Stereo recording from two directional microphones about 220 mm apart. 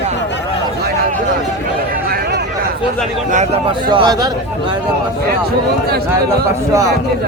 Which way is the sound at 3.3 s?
25° right (ahead or behind).